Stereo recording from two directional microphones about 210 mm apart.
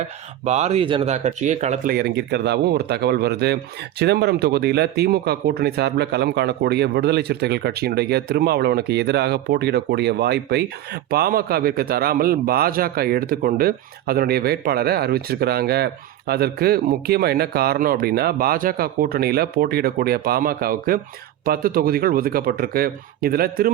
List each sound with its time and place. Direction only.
0.4 s speech: 35° right (ahead or behind)
1.9 s speech: 50° right (ahead or behind)